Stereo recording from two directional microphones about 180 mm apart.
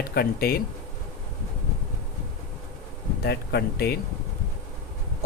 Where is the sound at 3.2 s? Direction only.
65° left (ahead or behind).